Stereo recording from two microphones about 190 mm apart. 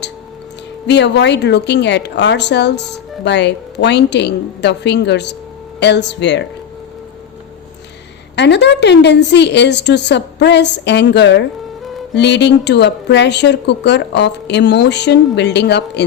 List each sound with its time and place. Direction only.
0.9 s a woman's voice: 65° left (ahead or behind)
8.4 s a woman's voice: 65° left (ahead or behind)